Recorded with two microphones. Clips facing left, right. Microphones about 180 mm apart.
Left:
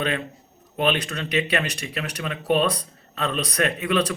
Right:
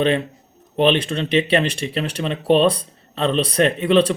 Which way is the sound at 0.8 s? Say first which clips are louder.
Right 6 dB; 25° right (ahead or behind).